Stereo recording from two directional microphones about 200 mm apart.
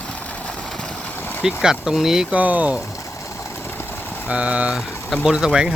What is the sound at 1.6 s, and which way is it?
Speech, 5° right (ahead or behind).